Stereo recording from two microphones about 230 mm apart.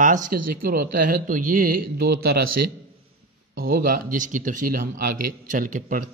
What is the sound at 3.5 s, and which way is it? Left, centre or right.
Speech, right.